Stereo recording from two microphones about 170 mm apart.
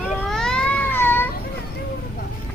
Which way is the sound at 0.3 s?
5° left (ahead or behind).